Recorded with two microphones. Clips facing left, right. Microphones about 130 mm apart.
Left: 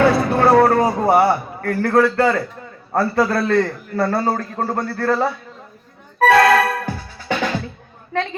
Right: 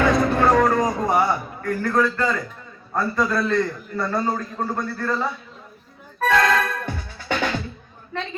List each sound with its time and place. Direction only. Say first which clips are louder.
0.0 s music: left 3 dB; 35° left (ahead or behind)
1.6 s a man's voice: left 5 dB; 65° left (ahead or behind)
6.1 s music: left 6 dB; 65° left (ahead or behind)
6.7 s music: left 4 dB; 30° left (ahead or behind)